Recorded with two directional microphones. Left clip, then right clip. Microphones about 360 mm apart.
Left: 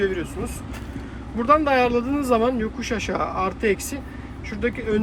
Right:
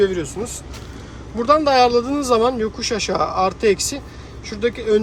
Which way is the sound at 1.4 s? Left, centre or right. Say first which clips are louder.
Right 4 dB; centre.